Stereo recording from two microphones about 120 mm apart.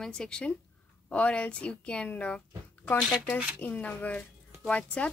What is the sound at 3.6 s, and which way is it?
Speech, 10° left (ahead or behind).